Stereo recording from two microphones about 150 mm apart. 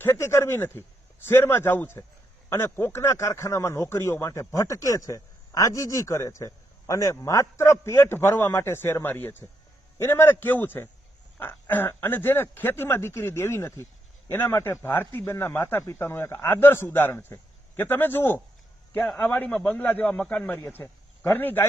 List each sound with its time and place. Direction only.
0.0 s a man's voice: 15° left (ahead or behind)